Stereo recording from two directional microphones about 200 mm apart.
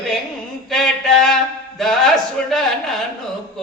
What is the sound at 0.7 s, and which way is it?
Mantra, centre (ahead or behind).